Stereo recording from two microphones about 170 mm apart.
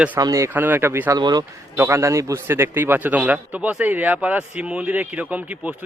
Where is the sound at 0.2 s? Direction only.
20° right (ahead or behind).